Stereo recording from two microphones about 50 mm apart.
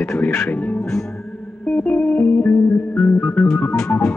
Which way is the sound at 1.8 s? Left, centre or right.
Left.